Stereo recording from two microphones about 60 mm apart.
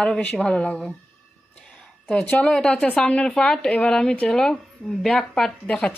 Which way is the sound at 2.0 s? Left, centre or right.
Left.